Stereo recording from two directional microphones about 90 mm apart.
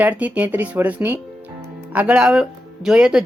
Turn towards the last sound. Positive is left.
turn(degrees=-5)  # may be behind; listen again after turning